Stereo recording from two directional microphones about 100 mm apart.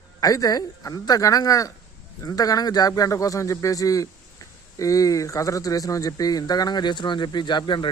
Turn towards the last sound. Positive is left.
turn(degrees=50)  # may be behind; listen again after turning